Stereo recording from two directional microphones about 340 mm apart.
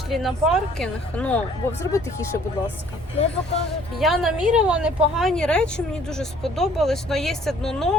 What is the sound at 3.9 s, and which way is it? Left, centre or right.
A woman's voice, centre.